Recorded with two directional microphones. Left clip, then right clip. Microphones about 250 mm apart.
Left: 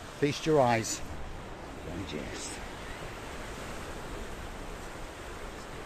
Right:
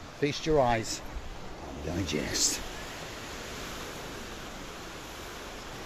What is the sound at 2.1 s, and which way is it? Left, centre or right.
Speech, right.